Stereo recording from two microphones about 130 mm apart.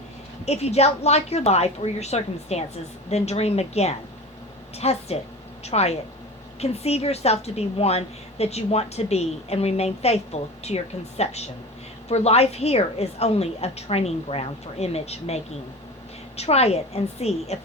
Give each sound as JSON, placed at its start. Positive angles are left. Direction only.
{"t": 0.4, "sound": "a woman's voice", "side_deg": 55}